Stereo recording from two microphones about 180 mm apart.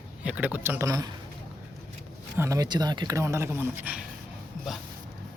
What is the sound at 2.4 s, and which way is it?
Speech, 20° right (ahead or behind).